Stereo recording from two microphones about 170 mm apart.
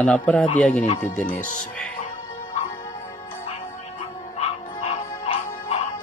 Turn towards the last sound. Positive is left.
turn(degrees=35)  # may be behind; listen again after turning